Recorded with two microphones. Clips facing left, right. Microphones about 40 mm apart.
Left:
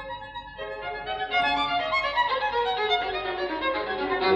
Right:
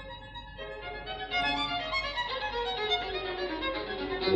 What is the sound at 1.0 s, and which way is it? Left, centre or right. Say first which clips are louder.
Music: left 6 dB; left.